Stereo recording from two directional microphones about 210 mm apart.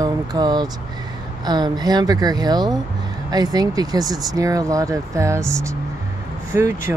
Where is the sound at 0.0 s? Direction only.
20° right (ahead or behind).